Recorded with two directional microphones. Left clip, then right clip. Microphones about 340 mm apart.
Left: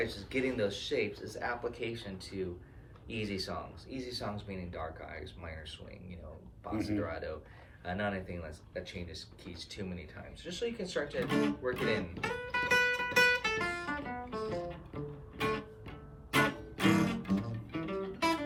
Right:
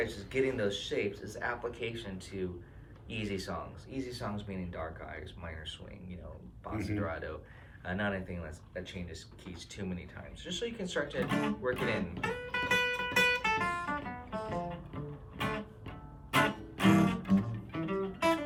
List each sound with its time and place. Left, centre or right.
0.0 s speech: centre
10.4 s music: centre